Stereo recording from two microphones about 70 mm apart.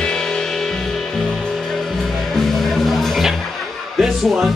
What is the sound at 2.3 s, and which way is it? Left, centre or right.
Music, centre.